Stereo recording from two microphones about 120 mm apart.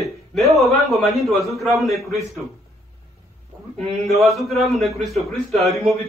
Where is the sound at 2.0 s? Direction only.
25° left (ahead or behind).